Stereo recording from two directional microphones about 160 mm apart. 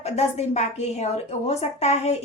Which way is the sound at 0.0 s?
40° left (ahead or behind).